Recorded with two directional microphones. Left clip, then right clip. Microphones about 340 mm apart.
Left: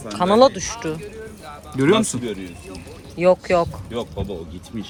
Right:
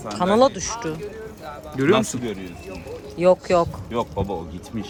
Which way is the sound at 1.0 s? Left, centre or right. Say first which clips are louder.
Right 1 dB; right.